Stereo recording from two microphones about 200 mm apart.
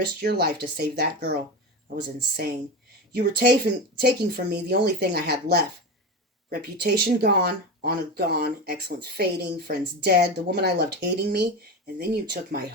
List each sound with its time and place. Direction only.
0.2 s speech: 50° right (ahead or behind)